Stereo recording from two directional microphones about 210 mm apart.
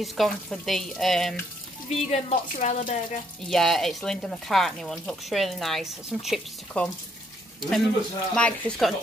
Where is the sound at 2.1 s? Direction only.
30° left (ahead or behind).